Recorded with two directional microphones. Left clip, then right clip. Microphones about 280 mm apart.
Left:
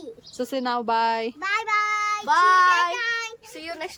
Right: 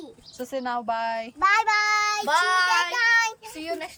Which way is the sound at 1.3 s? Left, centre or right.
Centre.